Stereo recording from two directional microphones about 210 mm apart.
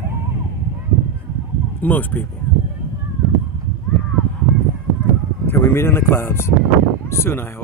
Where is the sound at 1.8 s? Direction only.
10° left (ahead or behind).